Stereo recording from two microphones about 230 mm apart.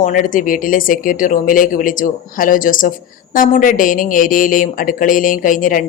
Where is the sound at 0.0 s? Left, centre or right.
Left.